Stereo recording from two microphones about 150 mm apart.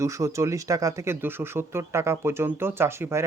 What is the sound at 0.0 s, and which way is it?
Speech, 20° right (ahead or behind).